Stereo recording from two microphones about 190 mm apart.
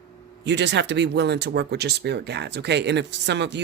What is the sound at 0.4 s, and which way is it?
A man's voice, 65° right (ahead or behind).